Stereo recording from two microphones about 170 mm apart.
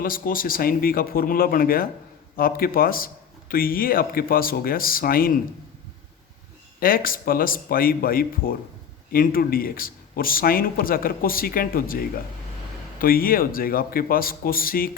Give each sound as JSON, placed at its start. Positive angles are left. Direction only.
{"t": 0.0, "sound": "speech", "side_deg": 55}
{"t": 6.7, "sound": "speech", "side_deg": 60}